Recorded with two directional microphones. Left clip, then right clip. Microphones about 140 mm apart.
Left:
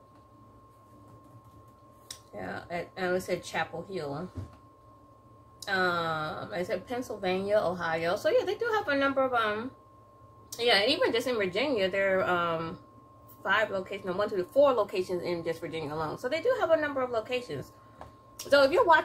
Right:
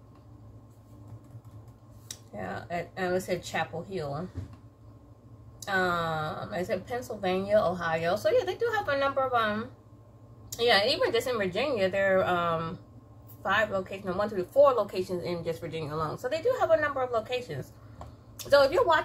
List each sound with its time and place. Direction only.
2.3 s a woman's voice: 20° left (ahead or behind)
5.7 s a woman's voice: 20° left (ahead or behind)